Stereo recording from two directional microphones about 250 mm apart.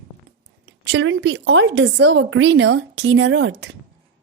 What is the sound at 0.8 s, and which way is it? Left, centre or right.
Speech, right.